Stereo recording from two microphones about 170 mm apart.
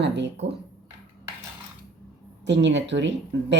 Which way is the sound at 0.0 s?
90° right.